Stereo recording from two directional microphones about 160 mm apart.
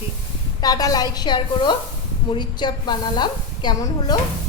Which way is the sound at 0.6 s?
25° left (ahead or behind).